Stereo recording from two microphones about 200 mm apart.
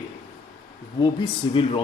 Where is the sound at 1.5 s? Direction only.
25° left (ahead or behind).